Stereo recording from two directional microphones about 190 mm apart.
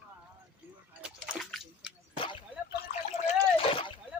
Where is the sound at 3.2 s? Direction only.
30° left (ahead or behind).